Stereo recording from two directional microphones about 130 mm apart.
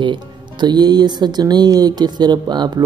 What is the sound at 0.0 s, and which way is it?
Speech, 35° right (ahead or behind).